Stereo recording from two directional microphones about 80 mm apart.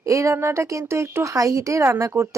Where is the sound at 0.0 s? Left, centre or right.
Right.